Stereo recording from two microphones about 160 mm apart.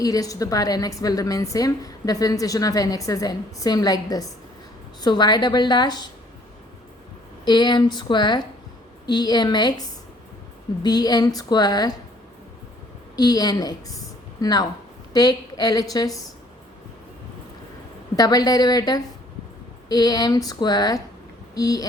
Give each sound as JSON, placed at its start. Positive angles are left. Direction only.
{"t": 0.0, "sound": "a woman's voice", "side_deg": 20}
{"t": 7.4, "sound": "a woman's voice", "side_deg": 30}
{"t": 10.8, "sound": "a woman's voice", "side_deg": 25}
{"t": 13.1, "sound": "a woman's voice", "side_deg": 25}
{"t": 18.2, "sound": "a woman's voice", "side_deg": 25}